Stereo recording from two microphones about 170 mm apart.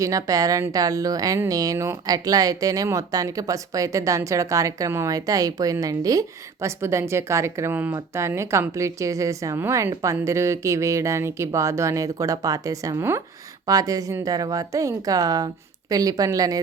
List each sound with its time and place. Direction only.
0.0 s a woman's voice: 20° right (ahead or behind)